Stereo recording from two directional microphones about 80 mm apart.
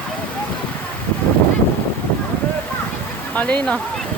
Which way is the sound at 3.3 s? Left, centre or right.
Centre.